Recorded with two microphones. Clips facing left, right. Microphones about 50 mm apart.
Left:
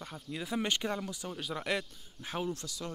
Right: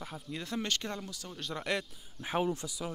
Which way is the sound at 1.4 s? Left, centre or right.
Centre.